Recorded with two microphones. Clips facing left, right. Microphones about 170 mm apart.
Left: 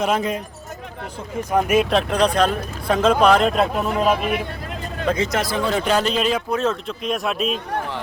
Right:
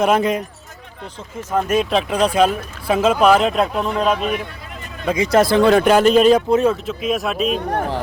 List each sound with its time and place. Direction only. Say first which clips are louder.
0.0 s speech: right 5 dB; 65° right (ahead or behind)
1.4 s a man's voice: left 1 dB; 15° left (ahead or behind)
5.0 s speech: right 2 dB; 10° right (ahead or behind)
5.4 s speech: right 9 dB; 70° right (ahead or behind); by 6.4 s 45° right (ahead or behind)
6.6 s a man's voice: right 5 dB; 5° right (ahead or behind)